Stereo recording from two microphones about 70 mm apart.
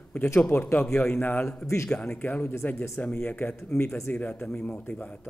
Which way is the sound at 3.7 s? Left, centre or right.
Left.